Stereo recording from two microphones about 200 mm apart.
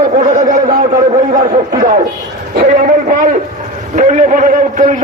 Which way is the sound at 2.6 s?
40° right (ahead or behind).